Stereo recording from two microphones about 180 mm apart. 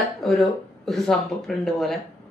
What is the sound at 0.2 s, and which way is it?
A woman's voice, centre (ahead or behind).